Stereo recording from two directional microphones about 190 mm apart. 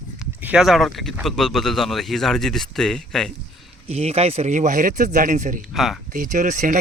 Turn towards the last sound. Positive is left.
turn(degrees=-45)  # may be behind; listen again after turning